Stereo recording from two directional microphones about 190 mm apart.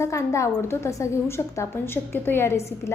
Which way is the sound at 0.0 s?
15° left (ahead or behind).